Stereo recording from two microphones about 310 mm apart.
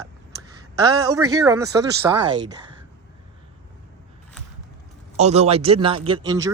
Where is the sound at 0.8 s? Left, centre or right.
Centre.